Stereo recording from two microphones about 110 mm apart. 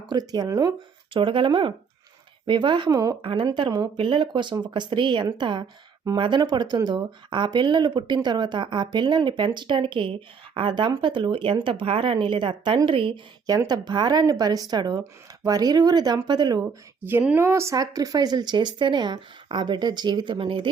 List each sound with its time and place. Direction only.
0.1 s speech: 40° right (ahead or behind)
1.1 s speech: 50° right (ahead or behind)
3.4 s speech: 40° right (ahead or behind)
13.5 s speech: 35° right (ahead or behind)
17.1 s speech: 20° right (ahead or behind); by 20.7 s 55° right (ahead or behind)